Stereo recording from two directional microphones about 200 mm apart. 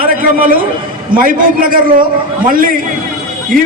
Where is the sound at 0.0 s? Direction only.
45° right (ahead or behind).